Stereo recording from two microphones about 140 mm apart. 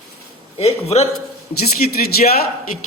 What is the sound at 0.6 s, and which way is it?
Speech, 50° left (ahead or behind).